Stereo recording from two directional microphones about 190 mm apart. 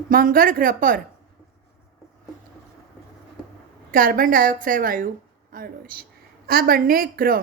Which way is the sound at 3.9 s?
45° right (ahead or behind).